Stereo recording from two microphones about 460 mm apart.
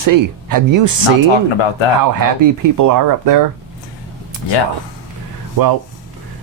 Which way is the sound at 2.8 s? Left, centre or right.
Right.